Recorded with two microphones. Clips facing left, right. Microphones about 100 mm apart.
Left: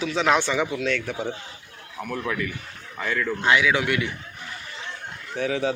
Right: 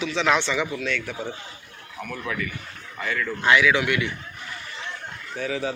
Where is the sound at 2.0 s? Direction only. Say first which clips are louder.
Left 4 dB; 5° left (ahead or behind).